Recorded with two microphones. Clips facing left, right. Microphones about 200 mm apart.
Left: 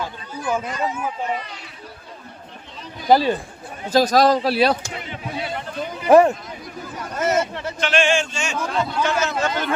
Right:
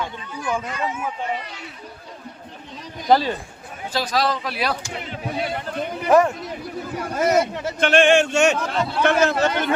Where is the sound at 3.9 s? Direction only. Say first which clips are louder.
Left 7 dB; 45° left (ahead or behind).